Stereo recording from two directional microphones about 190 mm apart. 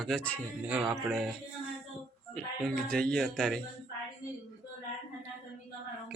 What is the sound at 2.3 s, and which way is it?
A man's voice, 5° left (ahead or behind).